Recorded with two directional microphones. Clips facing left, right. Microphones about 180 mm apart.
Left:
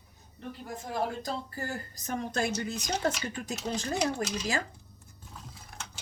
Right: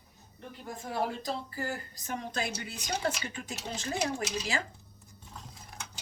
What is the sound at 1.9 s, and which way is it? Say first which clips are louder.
A woman's voice: left 8 dB; 40° left (ahead or behind).